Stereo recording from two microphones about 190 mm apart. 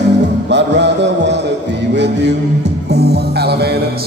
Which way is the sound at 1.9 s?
65° right (ahead or behind).